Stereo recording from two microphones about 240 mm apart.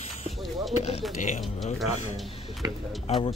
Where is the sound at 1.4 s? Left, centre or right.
Centre.